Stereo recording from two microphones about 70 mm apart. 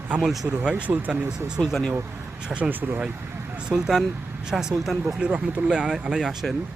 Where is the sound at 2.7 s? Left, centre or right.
Right.